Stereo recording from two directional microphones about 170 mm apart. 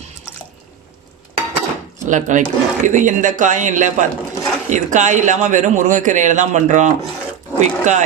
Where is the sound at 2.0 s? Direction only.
45° right (ahead or behind).